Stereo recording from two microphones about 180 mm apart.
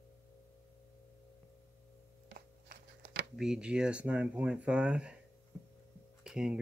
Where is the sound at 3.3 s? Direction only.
5° right (ahead or behind).